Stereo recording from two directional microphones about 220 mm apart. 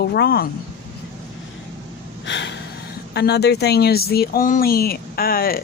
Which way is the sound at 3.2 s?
50° left (ahead or behind).